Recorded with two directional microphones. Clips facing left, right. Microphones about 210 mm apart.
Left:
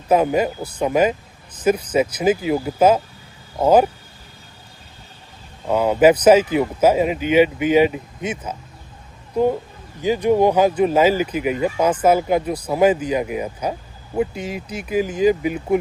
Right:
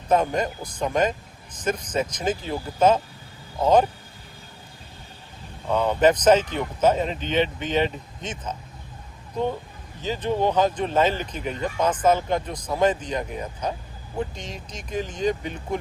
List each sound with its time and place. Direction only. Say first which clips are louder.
0.1 s speech: left 5 dB; 10° left (ahead or behind)
5.7 s speech: left 5 dB; 10° left (ahead or behind)
10.0 s speech: left 8 dB; 10° left (ahead or behind)